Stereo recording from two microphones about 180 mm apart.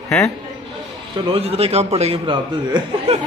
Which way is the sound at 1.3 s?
35° right (ahead or behind).